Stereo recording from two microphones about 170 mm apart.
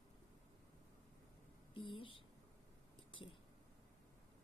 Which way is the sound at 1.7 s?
30° left (ahead or behind).